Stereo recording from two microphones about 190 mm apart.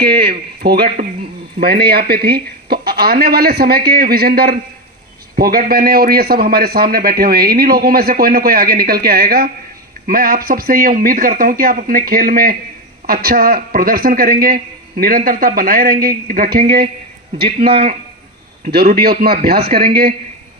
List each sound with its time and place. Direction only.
0.3 s a man's voice: 55° right (ahead or behind)
17.4 s a man's voice: 30° right (ahead or behind)
18.6 s a man's voice: 55° right (ahead or behind)